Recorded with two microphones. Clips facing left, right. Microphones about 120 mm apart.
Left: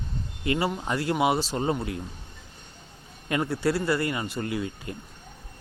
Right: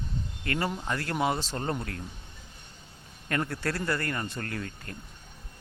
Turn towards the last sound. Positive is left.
turn(degrees=15)  # may be behind; listen again after turning